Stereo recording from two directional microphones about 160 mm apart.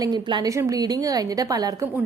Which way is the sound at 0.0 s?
30° right (ahead or behind).